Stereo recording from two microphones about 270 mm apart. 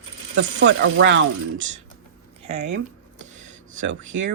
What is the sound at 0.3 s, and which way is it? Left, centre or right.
Speech, right.